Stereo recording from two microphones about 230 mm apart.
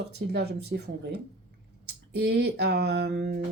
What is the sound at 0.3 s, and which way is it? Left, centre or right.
Speech, right.